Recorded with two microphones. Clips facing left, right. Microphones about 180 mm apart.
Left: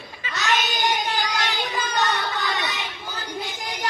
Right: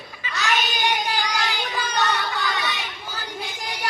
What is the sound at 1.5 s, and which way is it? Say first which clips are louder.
Child singing: left 1 dB; 20° left (ahead or behind).